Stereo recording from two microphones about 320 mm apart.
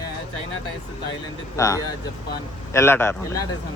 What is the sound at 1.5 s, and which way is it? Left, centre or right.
Speech, centre.